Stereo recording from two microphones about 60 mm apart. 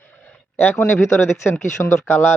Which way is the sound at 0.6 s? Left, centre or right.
Left.